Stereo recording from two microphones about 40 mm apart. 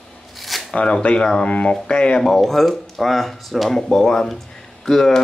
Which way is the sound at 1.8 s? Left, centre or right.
Left.